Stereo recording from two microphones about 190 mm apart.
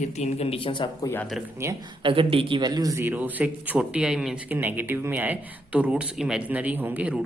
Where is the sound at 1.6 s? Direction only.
15° right (ahead or behind).